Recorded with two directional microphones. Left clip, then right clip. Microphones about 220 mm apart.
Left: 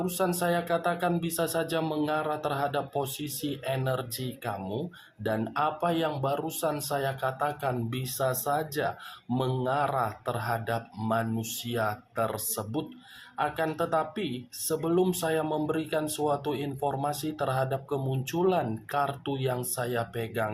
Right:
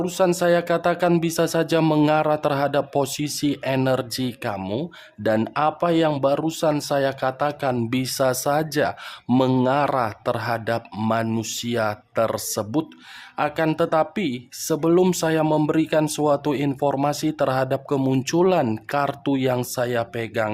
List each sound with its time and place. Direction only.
0.0 s speech: 45° right (ahead or behind)